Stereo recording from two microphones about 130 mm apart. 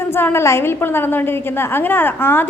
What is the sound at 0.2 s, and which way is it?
A woman's voice, 20° left (ahead or behind).